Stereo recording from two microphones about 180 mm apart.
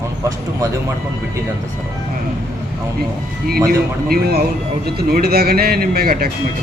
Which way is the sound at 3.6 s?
55° right (ahead or behind).